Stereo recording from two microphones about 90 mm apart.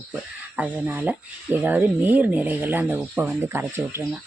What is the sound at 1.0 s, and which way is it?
Speech, 20° right (ahead or behind).